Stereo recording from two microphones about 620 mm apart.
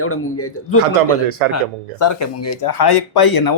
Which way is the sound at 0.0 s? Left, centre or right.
Left.